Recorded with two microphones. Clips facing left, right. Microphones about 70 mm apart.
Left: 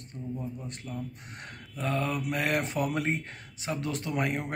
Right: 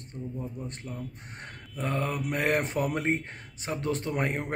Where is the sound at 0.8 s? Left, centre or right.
Right.